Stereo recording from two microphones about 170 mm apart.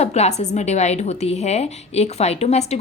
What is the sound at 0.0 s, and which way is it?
A woman's voice, 40° left (ahead or behind).